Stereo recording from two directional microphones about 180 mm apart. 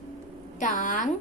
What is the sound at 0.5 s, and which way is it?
Speech, 45° left (ahead or behind).